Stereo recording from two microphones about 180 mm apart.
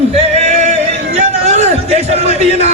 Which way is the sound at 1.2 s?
35° right (ahead or behind).